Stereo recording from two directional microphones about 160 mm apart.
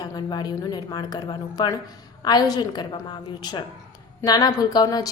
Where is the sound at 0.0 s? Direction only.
25° left (ahead or behind).